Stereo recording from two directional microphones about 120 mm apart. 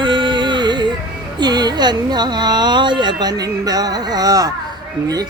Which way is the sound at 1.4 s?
35° right (ahead or behind).